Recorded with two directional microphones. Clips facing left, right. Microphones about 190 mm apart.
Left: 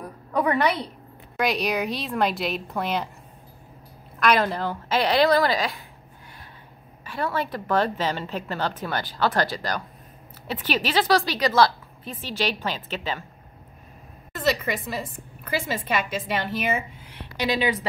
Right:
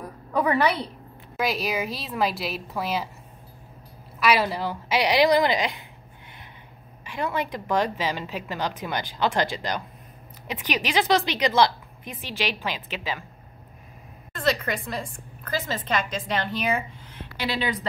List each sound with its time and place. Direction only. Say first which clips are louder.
0.3 s a woman's voice: even; 5° right (ahead or behind)
4.2 s a woman's voice: left 1 dB; 5° right (ahead or behind)
7.1 s a woman's voice: left 1 dB; 15° right (ahead or behind)
14.3 s a woman's voice: left 1 dB; 5° left (ahead or behind)
17.4 s a woman's voice: left 4 dB; 15° left (ahead or behind)